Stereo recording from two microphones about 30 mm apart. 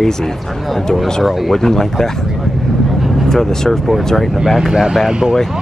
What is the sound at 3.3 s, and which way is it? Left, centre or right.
Speech, centre.